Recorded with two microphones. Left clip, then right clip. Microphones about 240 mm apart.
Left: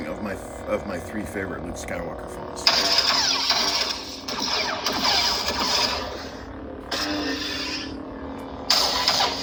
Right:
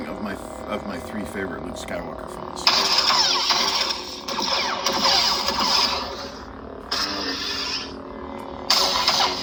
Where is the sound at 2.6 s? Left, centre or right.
Centre.